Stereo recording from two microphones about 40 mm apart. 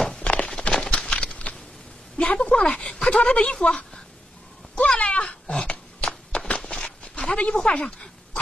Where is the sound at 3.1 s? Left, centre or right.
Left.